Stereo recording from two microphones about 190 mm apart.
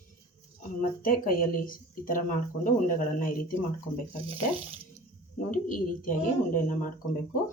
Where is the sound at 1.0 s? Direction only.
45° left (ahead or behind).